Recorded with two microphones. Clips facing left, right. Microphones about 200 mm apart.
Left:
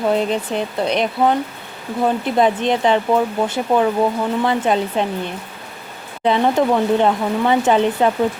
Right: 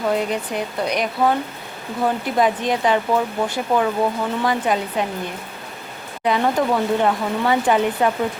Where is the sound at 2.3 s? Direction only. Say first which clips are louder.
Left 3 dB; 25° left (ahead or behind).